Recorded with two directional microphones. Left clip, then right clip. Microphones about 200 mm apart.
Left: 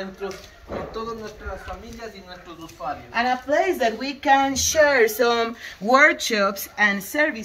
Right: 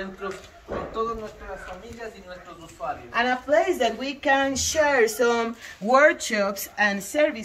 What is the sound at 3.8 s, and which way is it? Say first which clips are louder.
Speech: left 2 dB; 40° left (ahead or behind).